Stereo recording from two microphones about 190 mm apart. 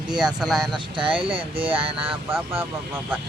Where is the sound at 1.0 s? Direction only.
25° right (ahead or behind).